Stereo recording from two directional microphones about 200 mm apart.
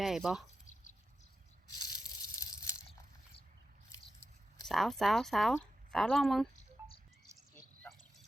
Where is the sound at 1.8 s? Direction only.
20° left (ahead or behind).